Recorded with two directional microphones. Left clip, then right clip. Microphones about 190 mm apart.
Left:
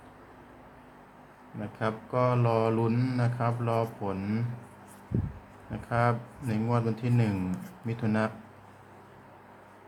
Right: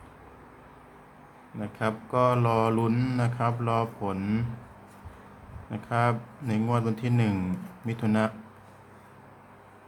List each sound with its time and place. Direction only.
1.8 s mantra: 20° right (ahead or behind)
5.7 s mantra: 15° right (ahead or behind)